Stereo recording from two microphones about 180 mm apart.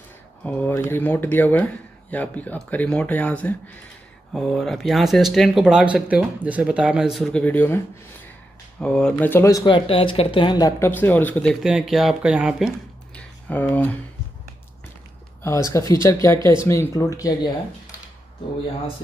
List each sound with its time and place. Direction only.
0.4 s speech: 10° left (ahead or behind)
15.4 s speech: 15° left (ahead or behind)